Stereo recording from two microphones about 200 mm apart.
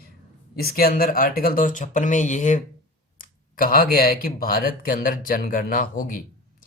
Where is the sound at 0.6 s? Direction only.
50° left (ahead or behind).